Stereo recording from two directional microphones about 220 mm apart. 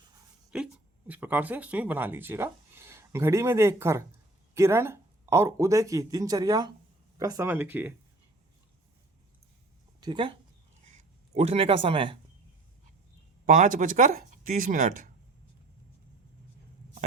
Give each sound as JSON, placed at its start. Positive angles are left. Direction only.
{"t": 0.5, "sound": "speech", "side_deg": -5}
{"t": 10.0, "sound": "speech", "side_deg": -20}
{"t": 11.3, "sound": "speech", "side_deg": -25}
{"t": 13.4, "sound": "speech", "side_deg": -35}